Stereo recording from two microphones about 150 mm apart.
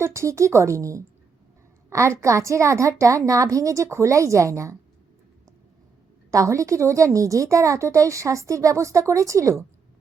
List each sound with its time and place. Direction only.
0.0 s a woman's voice: 20° right (ahead or behind)
6.3 s a woman's voice: 20° right (ahead or behind)